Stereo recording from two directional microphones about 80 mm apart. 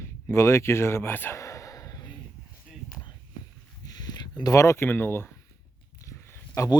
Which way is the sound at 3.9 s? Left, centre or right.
Left.